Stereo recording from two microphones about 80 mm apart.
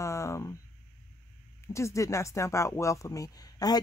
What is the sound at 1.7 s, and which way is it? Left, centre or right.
Speech, left.